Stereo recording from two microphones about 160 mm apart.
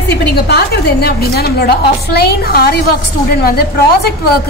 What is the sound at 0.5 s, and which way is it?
A woman's voice, 80° left.